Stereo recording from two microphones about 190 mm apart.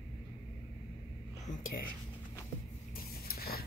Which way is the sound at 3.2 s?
55° left (ahead or behind).